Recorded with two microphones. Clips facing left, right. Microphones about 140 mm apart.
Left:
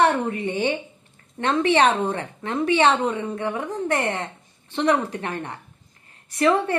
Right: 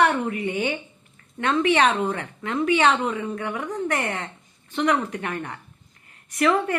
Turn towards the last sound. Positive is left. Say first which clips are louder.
# left 1 dB
turn(degrees=30)  # may be behind; listen again after turning